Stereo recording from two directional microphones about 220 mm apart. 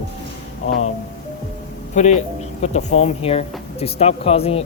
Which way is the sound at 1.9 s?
30° left (ahead or behind).